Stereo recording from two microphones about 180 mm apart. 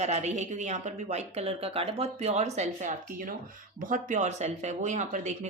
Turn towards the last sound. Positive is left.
turn(degrees=-40)  # may be behind; listen again after turning